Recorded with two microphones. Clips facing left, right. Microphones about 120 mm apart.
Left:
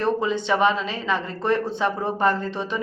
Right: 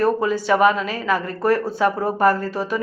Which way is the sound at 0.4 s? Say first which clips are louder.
Right 5 dB; 10° right (ahead or behind).